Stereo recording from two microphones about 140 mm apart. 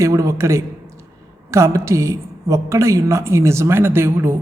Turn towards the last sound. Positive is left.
turn(degrees=-15)  # may be behind; listen again after turning